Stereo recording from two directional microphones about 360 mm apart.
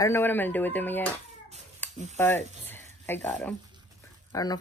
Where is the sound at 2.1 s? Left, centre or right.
Centre.